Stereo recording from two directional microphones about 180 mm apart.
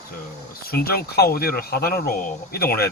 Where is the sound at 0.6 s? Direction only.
55° left (ahead or behind).